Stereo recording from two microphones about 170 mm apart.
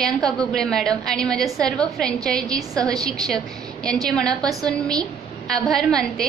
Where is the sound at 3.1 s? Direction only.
5° left (ahead or behind).